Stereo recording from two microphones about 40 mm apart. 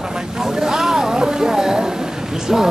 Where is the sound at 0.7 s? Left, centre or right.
Centre.